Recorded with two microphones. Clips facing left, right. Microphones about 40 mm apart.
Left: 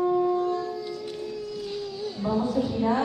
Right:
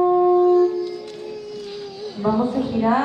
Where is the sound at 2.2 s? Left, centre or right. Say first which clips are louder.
Right 5 dB; right.